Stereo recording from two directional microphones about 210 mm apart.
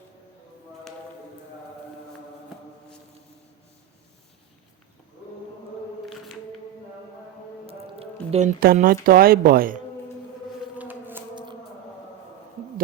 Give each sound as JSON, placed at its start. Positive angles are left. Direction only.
{"t": 7.7, "sound": "music", "side_deg": -30}
{"t": 9.0, "sound": "speech", "side_deg": -45}
{"t": 10.8, "sound": "civil defense siren", "side_deg": -10}